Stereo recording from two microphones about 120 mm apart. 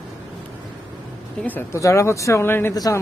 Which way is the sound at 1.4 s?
15° left (ahead or behind).